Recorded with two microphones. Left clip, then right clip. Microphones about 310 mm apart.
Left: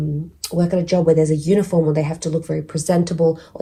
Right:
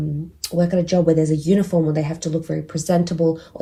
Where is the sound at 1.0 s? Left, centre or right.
Centre.